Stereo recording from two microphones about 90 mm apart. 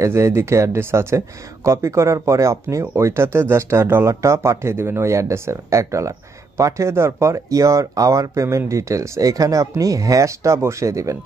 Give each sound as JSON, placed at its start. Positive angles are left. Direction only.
{"t": 0.0, "sound": "speech", "side_deg": -30}